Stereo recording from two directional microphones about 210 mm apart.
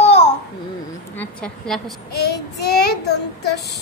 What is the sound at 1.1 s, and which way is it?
Speech, 5° left (ahead or behind).